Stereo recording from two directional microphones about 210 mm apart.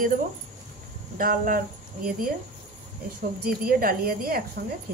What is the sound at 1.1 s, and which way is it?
Speech, 40° right (ahead or behind).